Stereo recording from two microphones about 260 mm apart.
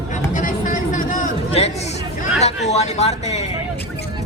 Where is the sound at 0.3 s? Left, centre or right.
Left.